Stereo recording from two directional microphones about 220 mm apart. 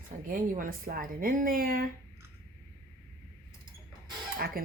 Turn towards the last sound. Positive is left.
turn(degrees=-40)  # may be behind; listen again after turning